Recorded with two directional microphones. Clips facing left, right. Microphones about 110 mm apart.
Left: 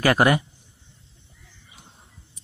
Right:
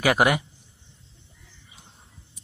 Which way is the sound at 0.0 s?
10° right (ahead or behind).